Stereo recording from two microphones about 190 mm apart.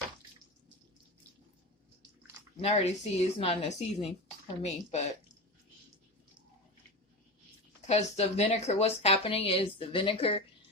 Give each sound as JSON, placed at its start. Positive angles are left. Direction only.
{"t": 2.6, "sound": "speech", "side_deg": 30}
{"t": 7.9, "sound": "speech", "side_deg": 35}